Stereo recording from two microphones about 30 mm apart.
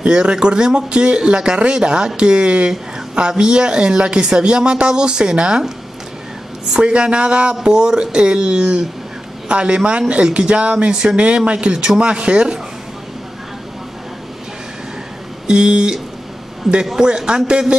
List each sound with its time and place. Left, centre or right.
0.0 s speech: right
6.8 s speech: right
10.9 s speech: right
11.1 s speech: right
15.4 s speech: right
16.6 s a man's voice: centre
17.5 s speech: right